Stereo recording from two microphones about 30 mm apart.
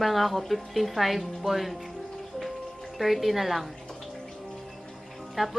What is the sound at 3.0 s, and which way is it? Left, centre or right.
Speech, centre.